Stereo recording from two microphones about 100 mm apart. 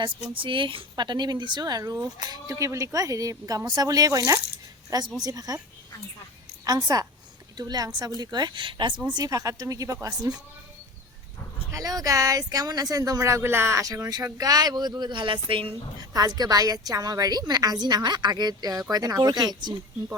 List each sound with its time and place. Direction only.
0.0 s speech: 55° right (ahead or behind); by 5.5 s 40° right (ahead or behind)
6.7 s speech: 40° right (ahead or behind)
9.0 s speech: 40° right (ahead or behind)
11.7 s speech: 35° right (ahead or behind); by 15.7 s 60° right (ahead or behind)
16.0 s speech: 40° right (ahead or behind)